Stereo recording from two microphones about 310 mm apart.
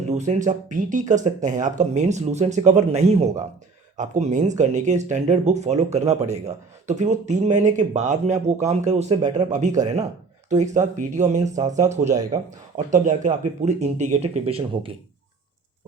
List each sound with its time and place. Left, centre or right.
0.1 s speech: right
12.0 s speech: centre
12.9 s speech: right